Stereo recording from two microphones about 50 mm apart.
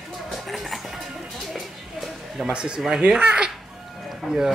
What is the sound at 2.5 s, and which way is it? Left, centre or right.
Speech, centre.